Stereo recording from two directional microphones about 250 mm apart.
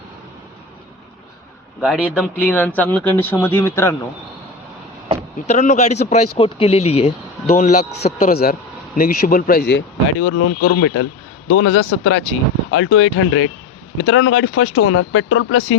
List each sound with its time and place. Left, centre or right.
1.8 s speech: centre
5.5 s a man's voice: left